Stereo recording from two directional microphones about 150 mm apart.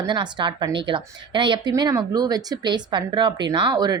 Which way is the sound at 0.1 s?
30° right (ahead or behind).